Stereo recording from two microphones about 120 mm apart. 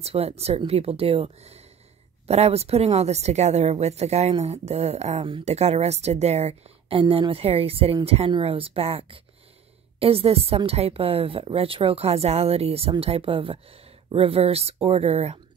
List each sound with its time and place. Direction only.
0.0 s speech: 60° right (ahead or behind)
7.0 s a woman's voice: 45° right (ahead or behind)